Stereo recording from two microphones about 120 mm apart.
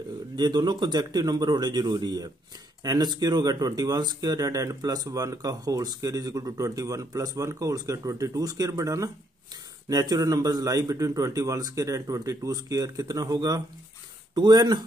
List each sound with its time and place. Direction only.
0.4 s speech: 35° right (ahead or behind)